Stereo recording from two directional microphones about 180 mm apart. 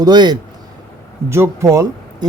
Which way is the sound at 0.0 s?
25° right (ahead or behind).